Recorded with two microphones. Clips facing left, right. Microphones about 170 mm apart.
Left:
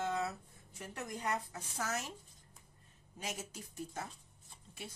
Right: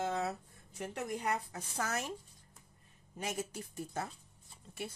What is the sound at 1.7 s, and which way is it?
Speech, 60° right (ahead or behind).